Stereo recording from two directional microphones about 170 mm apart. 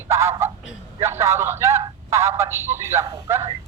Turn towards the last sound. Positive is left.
turn(degrees=-20)  # may be behind; listen again after turning